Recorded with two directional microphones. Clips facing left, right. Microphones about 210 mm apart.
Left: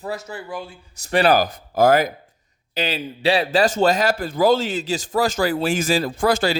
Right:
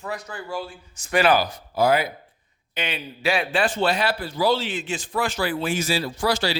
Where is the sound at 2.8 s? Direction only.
35° left (ahead or behind).